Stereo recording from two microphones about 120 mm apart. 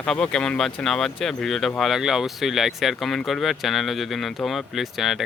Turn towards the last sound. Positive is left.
turn(degrees=0)  # may be behind; listen again after turning